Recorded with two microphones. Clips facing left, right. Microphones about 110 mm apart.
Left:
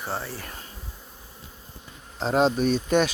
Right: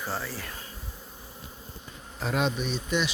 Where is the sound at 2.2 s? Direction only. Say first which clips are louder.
Left 7 dB; 30° left (ahead or behind); by 3.1 s 50° left (ahead or behind).